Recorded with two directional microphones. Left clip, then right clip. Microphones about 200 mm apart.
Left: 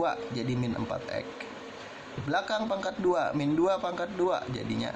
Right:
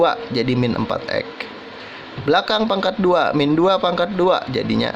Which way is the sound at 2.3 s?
45° right (ahead or behind).